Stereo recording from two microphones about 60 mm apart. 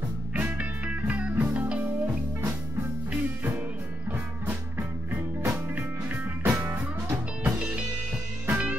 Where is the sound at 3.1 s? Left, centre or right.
Right.